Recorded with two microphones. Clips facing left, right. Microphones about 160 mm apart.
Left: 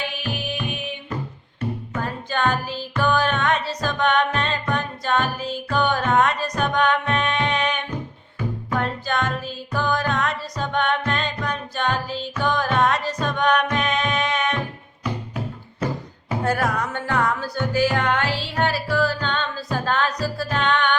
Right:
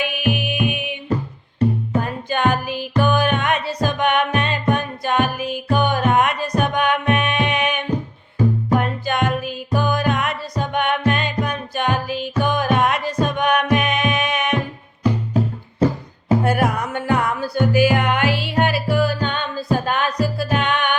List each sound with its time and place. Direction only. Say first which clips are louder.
0.0 s music: right 7 dB; 15° right (ahead or behind)
2.0 s music: right 2 dB; 15° right (ahead or behind)
8.4 s music: right 9 dB; 35° right (ahead or behind)
8.7 s music: right 4 dB; 15° right (ahead or behind)
15.8 s music: right 8 dB; 35° right (ahead or behind)
16.4 s music: right 3 dB; 15° right (ahead or behind)